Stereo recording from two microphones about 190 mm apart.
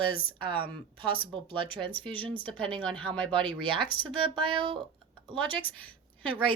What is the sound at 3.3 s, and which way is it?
Speech, 25° right (ahead or behind).